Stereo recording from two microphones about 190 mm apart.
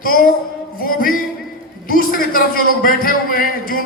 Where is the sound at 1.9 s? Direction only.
50° left (ahead or behind).